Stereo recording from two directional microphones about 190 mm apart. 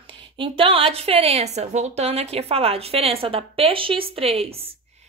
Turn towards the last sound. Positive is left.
turn(degrees=-30)  # may be behind; listen again after turning